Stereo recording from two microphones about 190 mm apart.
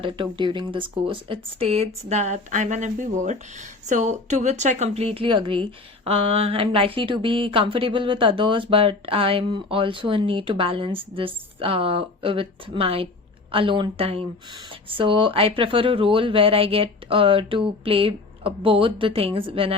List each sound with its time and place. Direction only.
0.0 s speech: 25° right (ahead or behind)